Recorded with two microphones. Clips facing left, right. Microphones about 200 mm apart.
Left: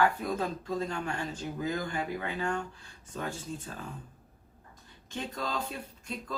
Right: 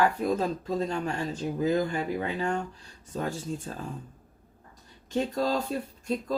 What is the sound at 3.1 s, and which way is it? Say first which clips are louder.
Speech: right 5 dB; 40° right (ahead or behind).